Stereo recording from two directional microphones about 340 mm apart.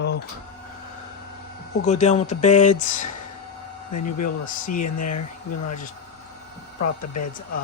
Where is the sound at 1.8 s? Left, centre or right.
Centre.